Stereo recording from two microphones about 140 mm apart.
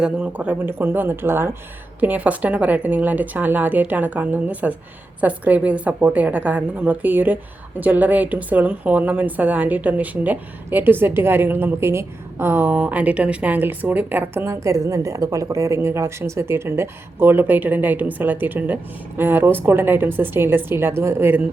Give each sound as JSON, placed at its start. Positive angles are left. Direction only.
{"t": 0.0, "sound": "a woman's voice", "side_deg": -10}